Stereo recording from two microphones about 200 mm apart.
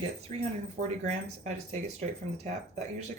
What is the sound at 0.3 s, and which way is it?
Speech, 35° right (ahead or behind).